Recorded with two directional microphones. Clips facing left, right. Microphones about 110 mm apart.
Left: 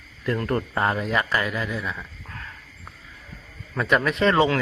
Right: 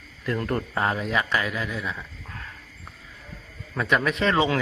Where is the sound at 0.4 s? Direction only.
Centre (ahead or behind).